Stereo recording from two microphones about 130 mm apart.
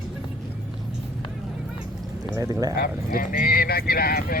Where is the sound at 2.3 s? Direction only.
30° right (ahead or behind).